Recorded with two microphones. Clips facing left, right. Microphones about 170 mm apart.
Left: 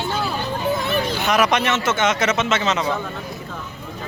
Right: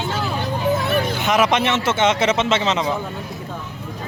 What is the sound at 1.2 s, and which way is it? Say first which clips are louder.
Speech: even; 20° right (ahead or behind).